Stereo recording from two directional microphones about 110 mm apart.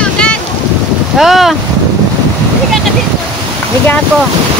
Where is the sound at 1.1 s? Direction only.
Centre (ahead or behind).